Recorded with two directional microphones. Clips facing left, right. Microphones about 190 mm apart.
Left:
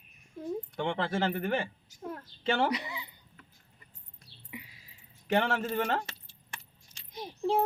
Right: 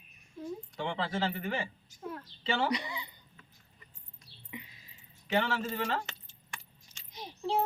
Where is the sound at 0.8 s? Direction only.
50° left (ahead or behind).